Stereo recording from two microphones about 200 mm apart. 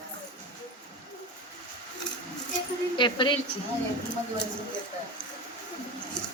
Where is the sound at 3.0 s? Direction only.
25° left (ahead or behind).